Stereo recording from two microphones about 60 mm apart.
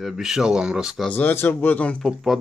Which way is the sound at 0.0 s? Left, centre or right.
Centre.